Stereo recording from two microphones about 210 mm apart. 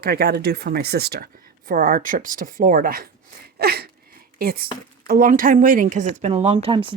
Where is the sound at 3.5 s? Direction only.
50° right (ahead or behind).